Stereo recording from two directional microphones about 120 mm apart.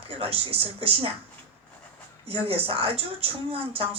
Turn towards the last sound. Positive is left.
turn(degrees=-50)  # may be behind; listen again after turning